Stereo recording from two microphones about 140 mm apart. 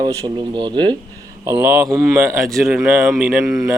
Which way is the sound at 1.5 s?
15° right (ahead or behind).